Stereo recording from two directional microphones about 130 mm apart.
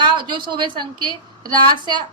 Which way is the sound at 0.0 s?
35° right (ahead or behind).